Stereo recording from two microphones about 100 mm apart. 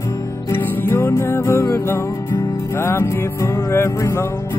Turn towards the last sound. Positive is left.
turn(degrees=25)  # may be behind; listen again after turning